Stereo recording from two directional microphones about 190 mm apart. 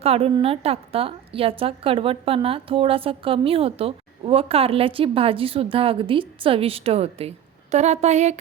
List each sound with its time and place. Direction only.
0.0 s a woman's voice: 30° right (ahead or behind)